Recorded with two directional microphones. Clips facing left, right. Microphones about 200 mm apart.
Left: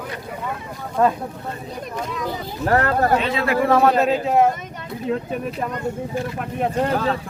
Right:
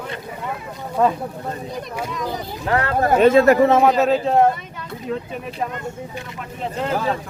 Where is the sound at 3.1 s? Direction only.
45° right (ahead or behind).